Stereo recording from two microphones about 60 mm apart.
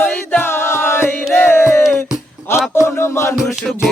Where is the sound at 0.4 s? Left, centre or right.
Left.